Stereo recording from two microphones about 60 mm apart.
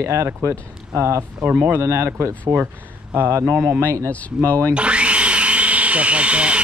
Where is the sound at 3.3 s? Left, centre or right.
Right.